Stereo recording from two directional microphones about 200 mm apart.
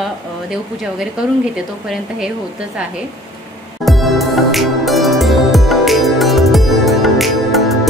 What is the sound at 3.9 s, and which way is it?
Music, centre (ahead or behind).